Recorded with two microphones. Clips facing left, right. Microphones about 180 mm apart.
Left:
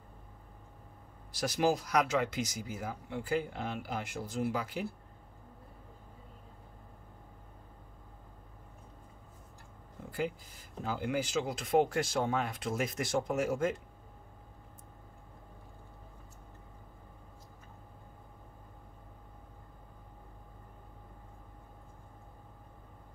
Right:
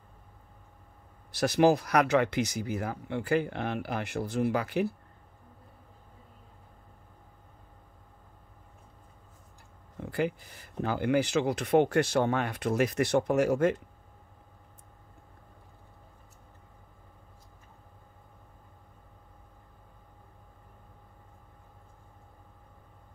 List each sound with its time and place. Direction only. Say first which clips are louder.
1.3 s speech: right 7 dB; 65° right (ahead or behind)
10.1 s speech: right 5 dB; 70° right (ahead or behind)